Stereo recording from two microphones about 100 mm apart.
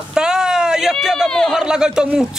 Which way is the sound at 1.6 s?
10° right (ahead or behind).